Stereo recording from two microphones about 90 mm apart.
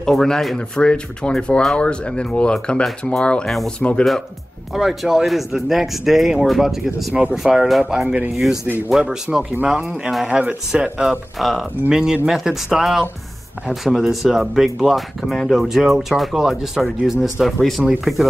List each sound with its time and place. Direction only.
0.0 s speech: 5° left (ahead or behind)